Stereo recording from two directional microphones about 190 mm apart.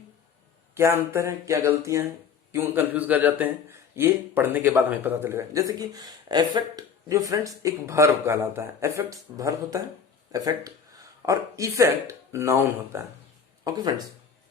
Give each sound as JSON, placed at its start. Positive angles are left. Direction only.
{"t": 0.7, "sound": "a man's voice", "side_deg": -15}